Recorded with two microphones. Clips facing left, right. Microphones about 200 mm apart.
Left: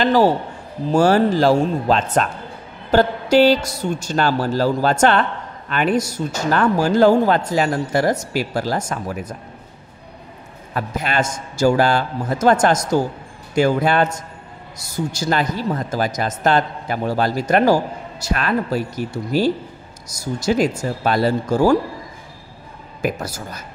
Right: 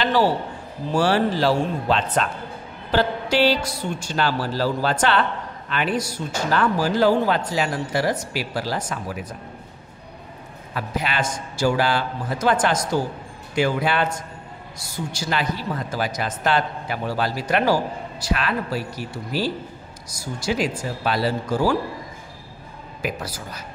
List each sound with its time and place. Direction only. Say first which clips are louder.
0.0 s a man's voice: left 5 dB; 45° left (ahead or behind)
10.7 s a man's voice: left 3 dB; 45° left (ahead or behind)
23.0 s a man's voice: left 5 dB; 45° left (ahead or behind)